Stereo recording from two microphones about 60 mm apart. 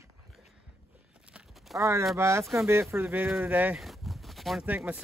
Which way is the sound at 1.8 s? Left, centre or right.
Right.